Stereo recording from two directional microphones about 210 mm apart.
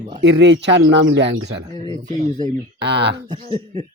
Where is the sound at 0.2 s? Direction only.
55° right (ahead or behind).